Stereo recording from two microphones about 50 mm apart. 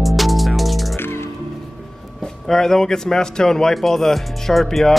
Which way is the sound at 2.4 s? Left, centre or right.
Centre.